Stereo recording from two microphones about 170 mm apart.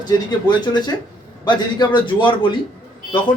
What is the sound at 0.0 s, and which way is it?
A man's voice, 25° left (ahead or behind).